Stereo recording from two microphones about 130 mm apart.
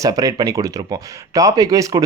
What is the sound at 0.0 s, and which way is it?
Speech, 30° right (ahead or behind).